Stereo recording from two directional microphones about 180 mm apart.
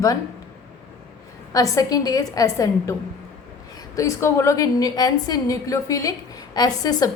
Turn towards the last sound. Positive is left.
turn(degrees=20)  # may be behind; listen again after turning